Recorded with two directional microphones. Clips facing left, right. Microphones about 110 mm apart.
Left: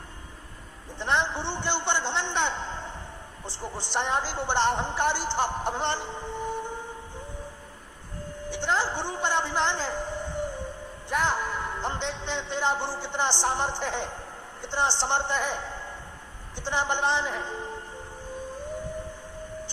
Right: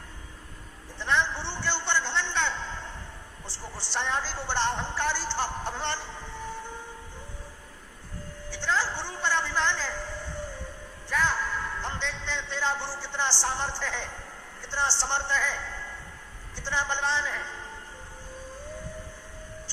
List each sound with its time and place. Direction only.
0.9 s a man's voice: 20° left (ahead or behind)
8.4 s a sound: 20° left (ahead or behind)
11.1 s a man's voice: 20° left (ahead or behind)